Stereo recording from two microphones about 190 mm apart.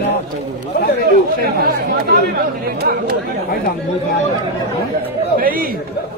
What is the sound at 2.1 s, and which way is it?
Speech, 55° right (ahead or behind).